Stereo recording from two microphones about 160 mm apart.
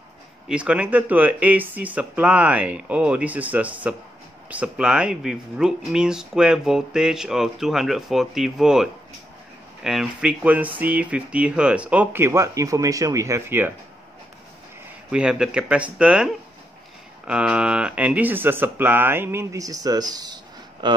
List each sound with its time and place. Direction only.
0.5 s speech: 10° right (ahead or behind)
9.8 s speech: 5° right (ahead or behind)
15.0 s speech: 5° right (ahead or behind); by 21.0 s 30° right (ahead or behind)